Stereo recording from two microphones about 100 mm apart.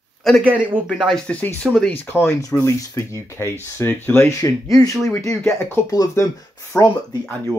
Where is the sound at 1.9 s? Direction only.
20° left (ahead or behind).